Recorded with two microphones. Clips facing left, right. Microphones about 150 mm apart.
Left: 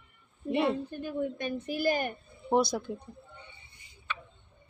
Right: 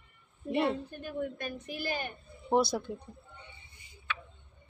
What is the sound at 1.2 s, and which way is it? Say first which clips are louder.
Speech: left 3 dB; 30° left (ahead or behind).